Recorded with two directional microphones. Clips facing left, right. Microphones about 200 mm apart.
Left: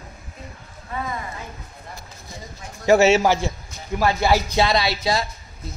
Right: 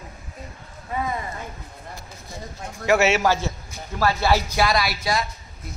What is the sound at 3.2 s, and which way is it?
A man's voice, 15° left (ahead or behind).